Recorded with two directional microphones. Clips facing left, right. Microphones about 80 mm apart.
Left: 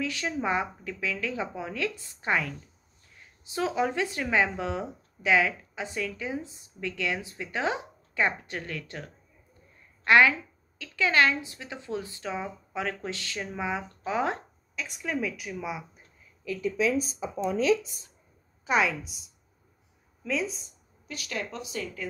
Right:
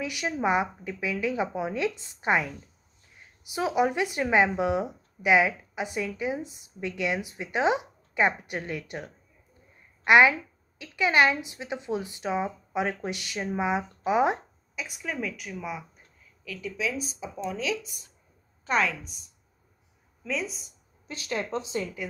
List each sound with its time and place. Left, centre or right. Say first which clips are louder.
0.0 s a woman's voice: right 2 dB; centre
14.9 s speech: left 2 dB; centre
16.4 s speech: left 5 dB; left
18.7 s speech: left 1 dB; centre
21.1 s speech: right 4 dB; right